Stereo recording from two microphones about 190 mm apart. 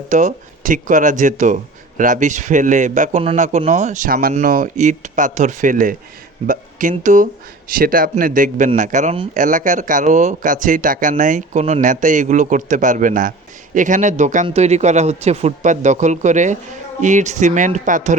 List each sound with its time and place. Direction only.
0.1 s speech: 40° right (ahead or behind)